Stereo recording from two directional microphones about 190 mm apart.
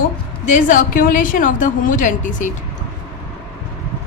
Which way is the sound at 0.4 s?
40° left (ahead or behind).